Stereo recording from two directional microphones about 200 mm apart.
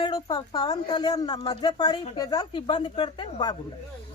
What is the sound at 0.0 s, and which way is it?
A woman's voice, 20° left (ahead or behind).